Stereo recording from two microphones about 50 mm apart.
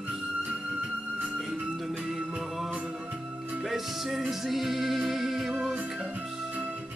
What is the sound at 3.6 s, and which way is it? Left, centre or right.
Music, centre.